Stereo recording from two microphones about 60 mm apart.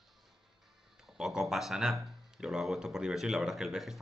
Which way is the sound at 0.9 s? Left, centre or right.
Centre.